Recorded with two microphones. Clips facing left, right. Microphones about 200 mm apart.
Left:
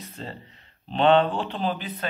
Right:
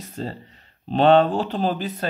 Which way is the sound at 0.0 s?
40° right (ahead or behind).